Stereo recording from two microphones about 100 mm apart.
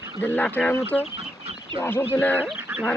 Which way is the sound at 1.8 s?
20° left (ahead or behind).